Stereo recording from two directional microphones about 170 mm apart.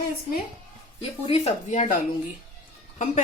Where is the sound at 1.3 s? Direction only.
40° left (ahead or behind).